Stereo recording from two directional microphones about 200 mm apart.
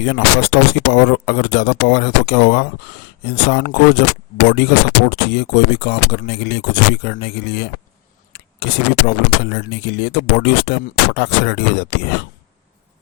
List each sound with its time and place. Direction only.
0.0 s speech: 60° left (ahead or behind)